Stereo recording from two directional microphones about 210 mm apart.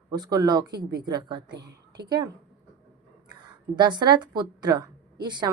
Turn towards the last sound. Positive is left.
turn(degrees=-20)  # may be behind; listen again after turning